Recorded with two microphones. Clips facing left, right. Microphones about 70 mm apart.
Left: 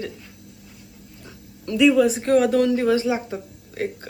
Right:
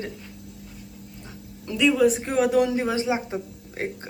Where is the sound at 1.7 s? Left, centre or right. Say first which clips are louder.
Left 3 dB; centre.